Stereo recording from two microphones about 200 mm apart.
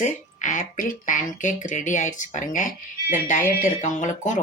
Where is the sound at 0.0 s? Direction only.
40° left (ahead or behind).